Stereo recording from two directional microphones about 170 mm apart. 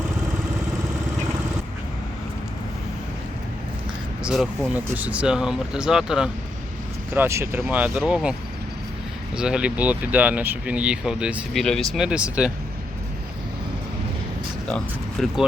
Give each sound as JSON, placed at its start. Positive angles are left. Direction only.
{"t": 4.2, "sound": "speech", "side_deg": -5}
{"t": 15.2, "sound": "speech", "side_deg": 0}